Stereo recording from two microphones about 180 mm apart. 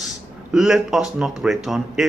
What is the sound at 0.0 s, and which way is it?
Speech, centre (ahead or behind).